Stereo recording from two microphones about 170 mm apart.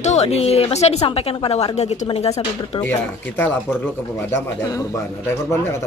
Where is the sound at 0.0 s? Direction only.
40° left (ahead or behind).